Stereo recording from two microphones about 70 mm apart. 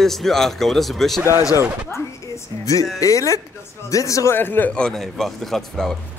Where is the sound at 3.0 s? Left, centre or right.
Left.